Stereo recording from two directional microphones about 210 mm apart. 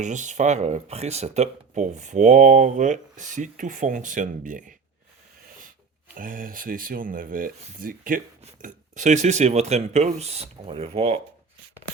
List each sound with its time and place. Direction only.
0.0 s speech: 35° right (ahead or behind)
6.1 s speech: 40° right (ahead or behind)